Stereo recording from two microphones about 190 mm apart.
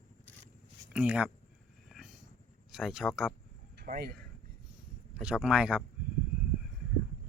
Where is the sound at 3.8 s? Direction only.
55° right (ahead or behind).